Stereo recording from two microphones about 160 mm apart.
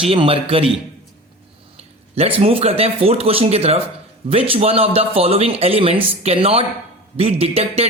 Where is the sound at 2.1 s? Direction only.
35° right (ahead or behind).